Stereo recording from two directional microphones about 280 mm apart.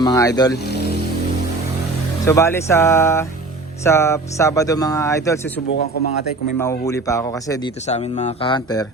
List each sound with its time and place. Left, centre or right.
0.0 s speech: centre
2.2 s speech: centre
6.6 s speech: centre
7.9 s speech: left